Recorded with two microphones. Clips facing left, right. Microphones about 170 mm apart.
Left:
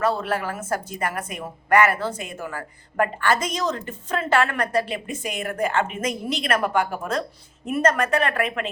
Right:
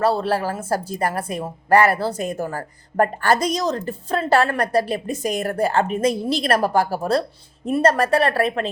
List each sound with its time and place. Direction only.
0.0 s a woman's voice: 35° right (ahead or behind)